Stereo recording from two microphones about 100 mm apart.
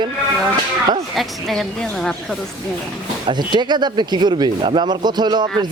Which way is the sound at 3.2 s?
50° right (ahead or behind).